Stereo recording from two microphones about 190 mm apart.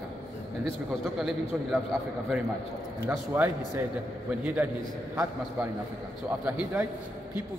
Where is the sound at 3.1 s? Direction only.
10° right (ahead or behind).